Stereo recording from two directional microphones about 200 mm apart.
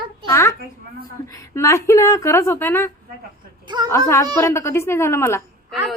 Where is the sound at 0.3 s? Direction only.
15° left (ahead or behind).